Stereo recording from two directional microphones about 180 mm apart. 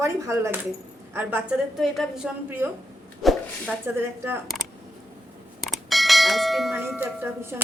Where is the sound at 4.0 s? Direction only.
15° right (ahead or behind).